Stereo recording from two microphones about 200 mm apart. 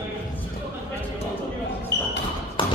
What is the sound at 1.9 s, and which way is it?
Basketball bounce, 60° left (ahead or behind).